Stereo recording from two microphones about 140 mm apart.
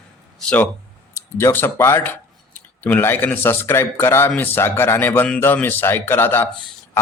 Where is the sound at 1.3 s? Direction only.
15° left (ahead or behind).